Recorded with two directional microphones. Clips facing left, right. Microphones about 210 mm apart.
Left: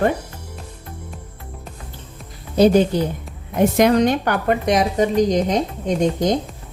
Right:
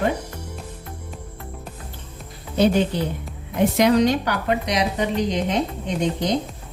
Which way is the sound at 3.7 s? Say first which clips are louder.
Left 1 dB; 50° left (ahead or behind).